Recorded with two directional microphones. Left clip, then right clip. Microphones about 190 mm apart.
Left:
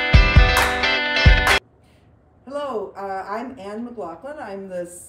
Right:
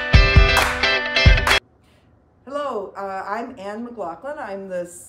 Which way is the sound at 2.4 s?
Centre (ahead or behind).